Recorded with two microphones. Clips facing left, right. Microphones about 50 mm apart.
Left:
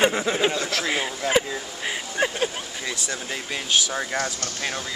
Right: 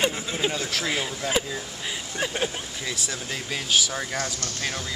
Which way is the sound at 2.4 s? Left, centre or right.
Centre.